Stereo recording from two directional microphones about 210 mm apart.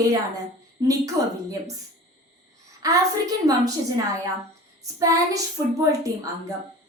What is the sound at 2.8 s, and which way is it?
Speech, 15° right (ahead or behind).